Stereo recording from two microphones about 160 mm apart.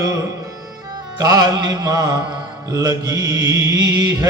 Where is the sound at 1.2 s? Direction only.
25° right (ahead or behind).